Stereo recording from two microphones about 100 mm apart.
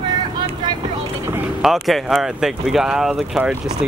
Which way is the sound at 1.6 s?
Centre (ahead or behind).